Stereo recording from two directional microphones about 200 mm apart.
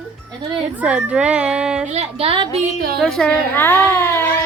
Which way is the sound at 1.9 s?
30° right (ahead or behind).